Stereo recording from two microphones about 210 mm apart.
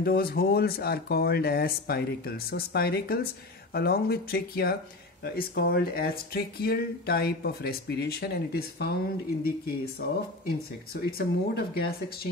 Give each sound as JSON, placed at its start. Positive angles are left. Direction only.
{"t": 0.0, "sound": "speech", "side_deg": 45}